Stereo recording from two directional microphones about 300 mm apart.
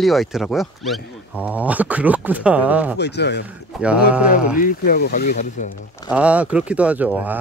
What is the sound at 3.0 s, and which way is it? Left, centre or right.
Speech, left.